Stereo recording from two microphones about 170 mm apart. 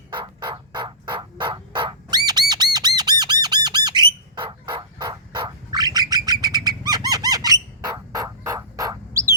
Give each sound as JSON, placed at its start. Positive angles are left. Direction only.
{"t": 0.1, "sound": "fowl", "side_deg": -25}